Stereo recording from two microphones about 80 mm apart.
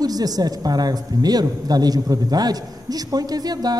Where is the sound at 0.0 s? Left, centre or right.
Right.